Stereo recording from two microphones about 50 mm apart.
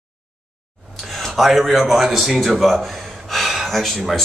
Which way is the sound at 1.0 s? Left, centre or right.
Centre.